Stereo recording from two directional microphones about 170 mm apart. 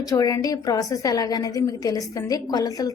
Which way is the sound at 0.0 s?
20° left (ahead or behind).